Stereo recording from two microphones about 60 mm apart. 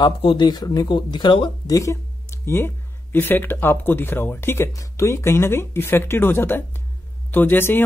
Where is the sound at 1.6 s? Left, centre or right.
Left.